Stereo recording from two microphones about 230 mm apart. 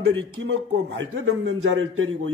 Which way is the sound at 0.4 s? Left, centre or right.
Right.